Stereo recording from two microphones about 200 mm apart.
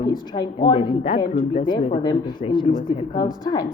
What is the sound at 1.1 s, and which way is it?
Speech, 40° left (ahead or behind).